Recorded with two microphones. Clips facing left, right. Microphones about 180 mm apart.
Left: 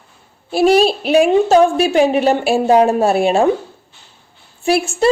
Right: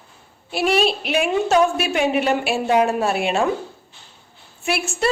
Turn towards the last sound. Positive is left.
turn(degrees=35)  # may be behind; listen again after turning